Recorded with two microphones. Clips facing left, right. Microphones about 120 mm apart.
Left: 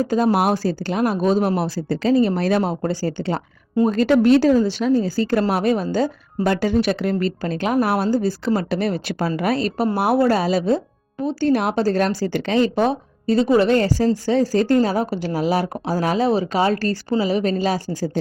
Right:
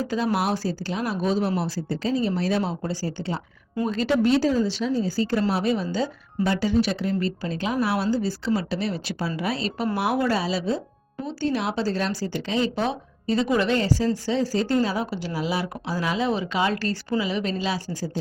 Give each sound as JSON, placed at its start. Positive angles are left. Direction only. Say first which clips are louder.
{"t": 0.0, "sound": "speech", "louder": "left 6 dB", "side_deg": 45}
{"t": 3.8, "sound": "speech", "louder": "left 6 dB", "side_deg": 55}
{"t": 13.7, "sound": "speech", "louder": "left 5 dB", "side_deg": 50}